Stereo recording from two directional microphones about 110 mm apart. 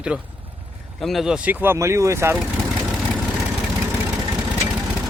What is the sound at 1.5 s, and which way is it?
Speech, 20° right (ahead or behind).